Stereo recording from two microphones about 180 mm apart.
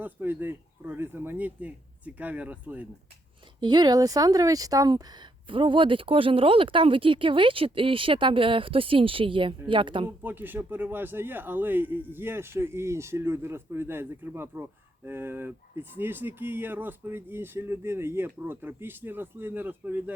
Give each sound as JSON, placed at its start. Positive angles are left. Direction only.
{"t": 0.0, "sound": "speech", "side_deg": -10}
{"t": 3.6, "sound": "speech", "side_deg": -25}
{"t": 10.2, "sound": "speech", "side_deg": -10}